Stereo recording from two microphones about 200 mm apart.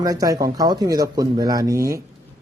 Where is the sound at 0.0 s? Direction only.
15° right (ahead or behind).